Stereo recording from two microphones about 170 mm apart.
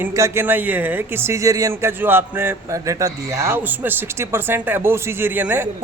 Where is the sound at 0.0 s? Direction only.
15° right (ahead or behind).